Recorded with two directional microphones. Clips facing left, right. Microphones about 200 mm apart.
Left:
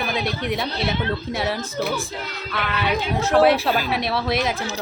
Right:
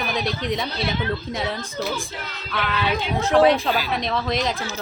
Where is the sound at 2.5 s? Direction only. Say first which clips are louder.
Even; centre (ahead or behind).